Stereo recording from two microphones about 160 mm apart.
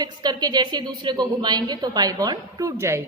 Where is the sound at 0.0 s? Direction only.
25° right (ahead or behind).